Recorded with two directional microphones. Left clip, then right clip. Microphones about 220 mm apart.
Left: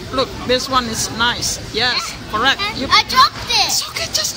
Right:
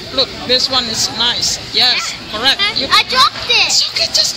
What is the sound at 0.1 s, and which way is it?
Speech, 20° left (ahead or behind).